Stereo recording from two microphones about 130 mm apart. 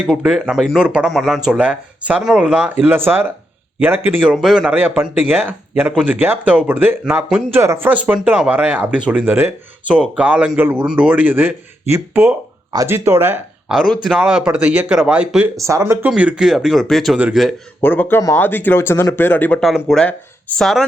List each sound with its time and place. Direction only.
0.1 s a man's voice: 5° right (ahead or behind)
13.9 s speech: 5° left (ahead or behind)
14.2 s a man's voice: 5° right (ahead or behind)
15.5 s a man's voice: 25° right (ahead or behind); by 17.5 s 5° right (ahead or behind)
17.7 s speech: 15° left (ahead or behind)
19.6 s speech: centre (ahead or behind)